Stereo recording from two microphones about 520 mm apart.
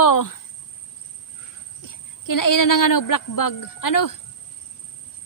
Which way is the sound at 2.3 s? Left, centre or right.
Left.